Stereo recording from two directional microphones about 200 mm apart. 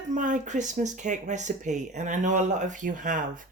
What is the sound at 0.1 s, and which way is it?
Speech, 40° right (ahead or behind).